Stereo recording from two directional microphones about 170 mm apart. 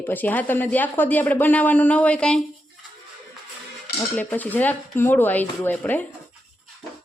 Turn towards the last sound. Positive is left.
turn(degrees=10)  # may be behind; listen again after turning